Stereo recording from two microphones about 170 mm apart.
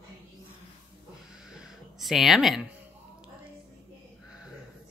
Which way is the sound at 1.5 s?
Centre (ahead or behind).